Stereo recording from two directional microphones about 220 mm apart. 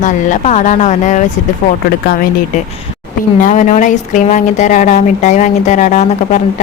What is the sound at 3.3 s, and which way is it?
Speech, 35° left (ahead or behind).